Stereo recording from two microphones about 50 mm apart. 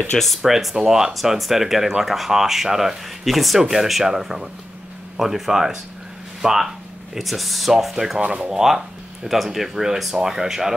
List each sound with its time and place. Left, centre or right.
0.4 s speech: centre
8.2 s speech: right
8.5 s speech: centre